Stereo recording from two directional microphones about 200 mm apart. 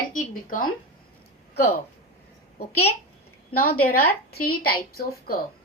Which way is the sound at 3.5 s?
45° left (ahead or behind).